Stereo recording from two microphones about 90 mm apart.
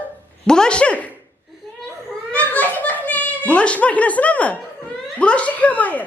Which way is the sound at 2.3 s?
15° left (ahead or behind).